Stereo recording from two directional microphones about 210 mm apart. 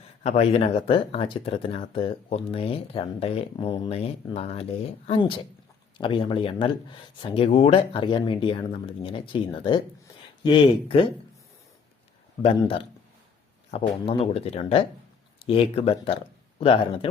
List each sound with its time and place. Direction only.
0.2 s speech: 30° left (ahead or behind)
12.4 s speech: 25° left (ahead or behind)